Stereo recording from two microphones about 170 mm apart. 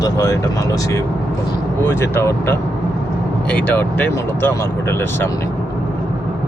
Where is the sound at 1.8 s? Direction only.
15° left (ahead or behind).